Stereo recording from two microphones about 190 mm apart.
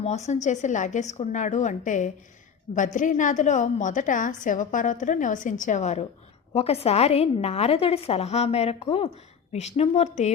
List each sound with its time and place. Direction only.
0.0 s a woman's voice: 35° left (ahead or behind)